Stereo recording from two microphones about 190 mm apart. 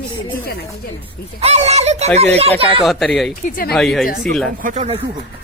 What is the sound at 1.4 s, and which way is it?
Speech, 35° right (ahead or behind).